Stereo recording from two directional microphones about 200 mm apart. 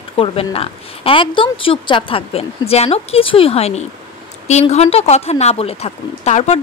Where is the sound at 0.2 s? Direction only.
30° left (ahead or behind).